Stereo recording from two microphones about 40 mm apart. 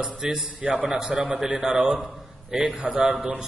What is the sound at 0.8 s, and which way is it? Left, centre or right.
Speech, centre.